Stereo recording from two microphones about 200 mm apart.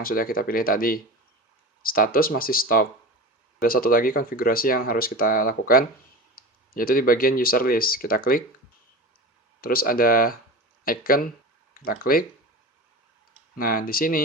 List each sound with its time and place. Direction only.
0.0 s speech: 45° left (ahead or behind)
9.6 s speech: 45° left (ahead or behind)
13.6 s speech: 45° left (ahead or behind)